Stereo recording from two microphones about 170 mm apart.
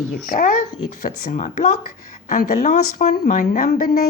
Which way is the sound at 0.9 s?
55° left (ahead or behind).